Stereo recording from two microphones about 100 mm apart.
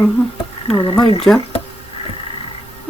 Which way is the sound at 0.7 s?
60° left (ahead or behind).